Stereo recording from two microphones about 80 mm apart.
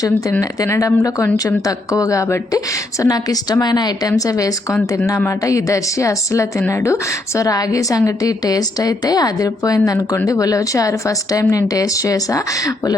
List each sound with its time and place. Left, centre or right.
0.6 s a woman's voice: left